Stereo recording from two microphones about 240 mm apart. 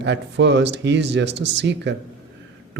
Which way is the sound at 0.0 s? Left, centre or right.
Right.